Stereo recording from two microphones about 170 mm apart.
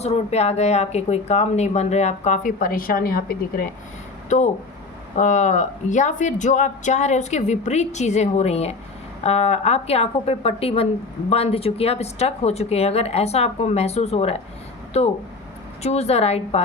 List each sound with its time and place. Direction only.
0.0 s speech: 40° left (ahead or behind); by 3.7 s 60° left (ahead or behind)
5.1 s speech: 45° left (ahead or behind)